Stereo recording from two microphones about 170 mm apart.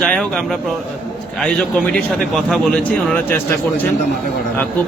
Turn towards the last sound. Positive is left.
turn(degrees=10)  # may be behind; listen again after turning